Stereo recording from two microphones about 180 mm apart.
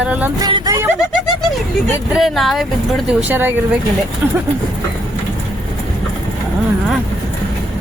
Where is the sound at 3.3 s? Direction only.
10° right (ahead or behind).